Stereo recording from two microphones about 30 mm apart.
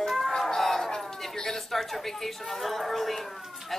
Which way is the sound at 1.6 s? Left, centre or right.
Centre.